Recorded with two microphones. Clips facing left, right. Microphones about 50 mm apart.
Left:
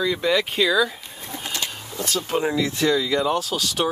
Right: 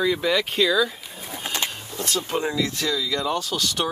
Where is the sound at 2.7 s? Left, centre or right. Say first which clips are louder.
Left 5 dB; left.